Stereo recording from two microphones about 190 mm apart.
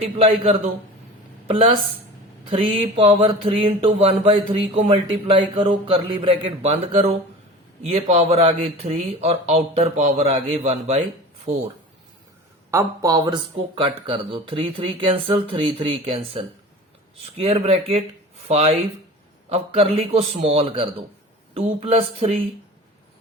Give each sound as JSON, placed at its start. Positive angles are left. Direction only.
{"t": 0.0, "sound": "speech", "side_deg": -30}
{"t": 12.7, "sound": "speech", "side_deg": -15}